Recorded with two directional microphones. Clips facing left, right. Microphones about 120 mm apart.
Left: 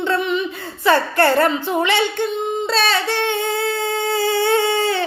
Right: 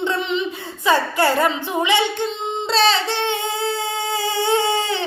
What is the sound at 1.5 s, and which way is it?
Speech, 15° right (ahead or behind).